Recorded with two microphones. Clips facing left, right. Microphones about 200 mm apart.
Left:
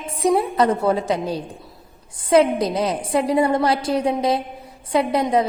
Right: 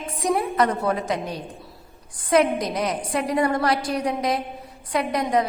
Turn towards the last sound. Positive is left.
turn(degrees=25)  # may be behind; listen again after turning